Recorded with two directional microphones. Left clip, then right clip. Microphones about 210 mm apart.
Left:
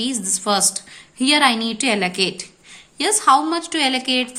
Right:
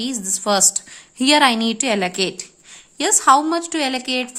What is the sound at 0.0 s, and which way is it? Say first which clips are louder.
A woman's voice: even; 45° right (ahead or behind).